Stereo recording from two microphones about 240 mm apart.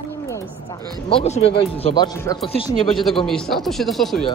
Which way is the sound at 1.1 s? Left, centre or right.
Left.